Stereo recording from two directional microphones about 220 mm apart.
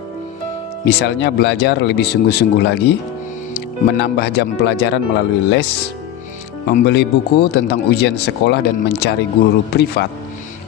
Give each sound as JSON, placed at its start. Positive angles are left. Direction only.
{"t": 0.9, "sound": "speech", "side_deg": 50}
{"t": 6.8, "sound": "speech", "side_deg": 50}